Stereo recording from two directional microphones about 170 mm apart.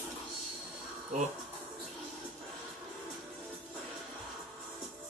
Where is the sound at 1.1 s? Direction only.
45° right (ahead or behind).